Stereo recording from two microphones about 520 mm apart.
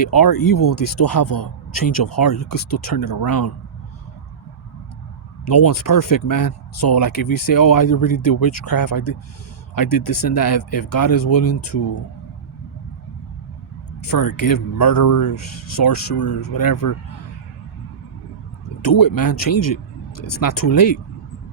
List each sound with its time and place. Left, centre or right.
0.2 s speech: left
5.5 s speech: left
14.0 s speech: left
18.8 s speech: left